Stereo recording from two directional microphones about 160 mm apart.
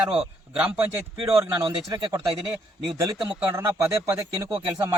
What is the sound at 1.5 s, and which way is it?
Speech, 25° right (ahead or behind).